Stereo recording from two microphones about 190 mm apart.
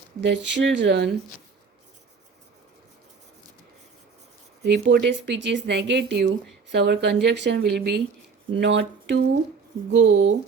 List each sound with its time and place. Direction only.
0.2 s speech: 70° right (ahead or behind)
4.6 s speech: 65° right (ahead or behind); by 10.3 s 85° right